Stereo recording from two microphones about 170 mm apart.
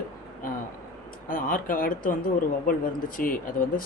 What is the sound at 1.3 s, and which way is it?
Speech, 55° left (ahead or behind).